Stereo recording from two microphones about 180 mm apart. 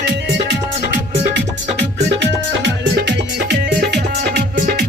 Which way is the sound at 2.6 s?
70° right (ahead or behind).